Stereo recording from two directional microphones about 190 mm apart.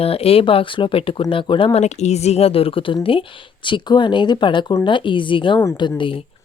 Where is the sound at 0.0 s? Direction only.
30° left (ahead or behind).